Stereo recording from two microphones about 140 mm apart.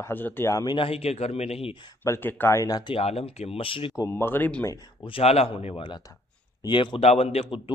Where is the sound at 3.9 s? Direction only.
20° left (ahead or behind).